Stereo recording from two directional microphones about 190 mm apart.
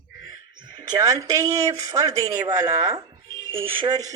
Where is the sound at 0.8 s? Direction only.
20° right (ahead or behind).